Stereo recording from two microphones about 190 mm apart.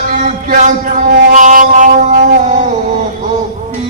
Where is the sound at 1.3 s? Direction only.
40° right (ahead or behind).